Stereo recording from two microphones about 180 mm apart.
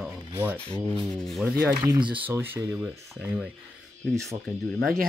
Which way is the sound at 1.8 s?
25° right (ahead or behind).